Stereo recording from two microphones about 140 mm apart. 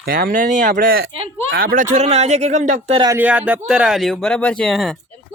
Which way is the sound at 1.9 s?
50° right (ahead or behind).